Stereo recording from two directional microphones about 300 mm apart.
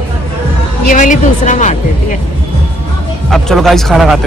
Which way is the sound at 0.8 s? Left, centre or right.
Left.